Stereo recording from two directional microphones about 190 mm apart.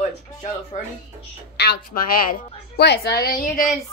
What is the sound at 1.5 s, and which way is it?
A woman's voice, 55° left (ahead or behind).